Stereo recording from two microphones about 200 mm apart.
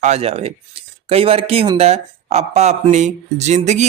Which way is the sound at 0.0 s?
30° right (ahead or behind).